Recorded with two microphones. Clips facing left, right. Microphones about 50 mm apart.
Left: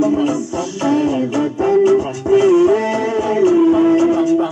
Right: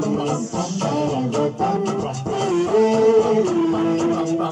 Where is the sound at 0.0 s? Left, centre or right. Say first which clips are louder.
Left 6 dB; left.